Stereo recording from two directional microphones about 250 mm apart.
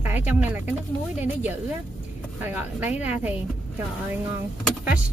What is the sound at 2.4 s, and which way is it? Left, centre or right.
Speech, centre.